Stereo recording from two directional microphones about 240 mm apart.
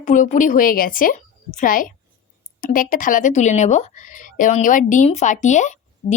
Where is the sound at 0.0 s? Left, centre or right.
Left.